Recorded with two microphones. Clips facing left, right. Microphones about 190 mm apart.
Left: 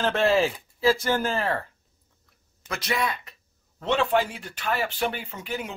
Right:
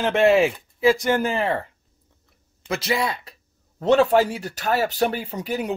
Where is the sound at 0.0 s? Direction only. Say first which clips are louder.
Right 5 dB; 20° right (ahead or behind).